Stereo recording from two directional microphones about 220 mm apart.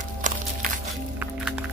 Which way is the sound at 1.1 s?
5° right (ahead or behind).